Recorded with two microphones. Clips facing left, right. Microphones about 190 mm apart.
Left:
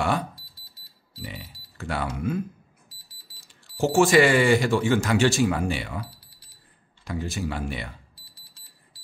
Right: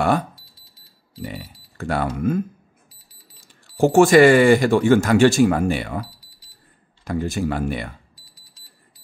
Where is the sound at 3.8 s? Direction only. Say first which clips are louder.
Right 6 dB; 55° right (ahead or behind).